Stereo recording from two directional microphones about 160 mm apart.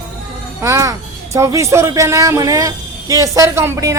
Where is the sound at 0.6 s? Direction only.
20° right (ahead or behind).